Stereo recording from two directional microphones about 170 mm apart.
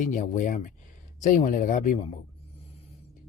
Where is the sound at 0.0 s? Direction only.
50° left (ahead or behind).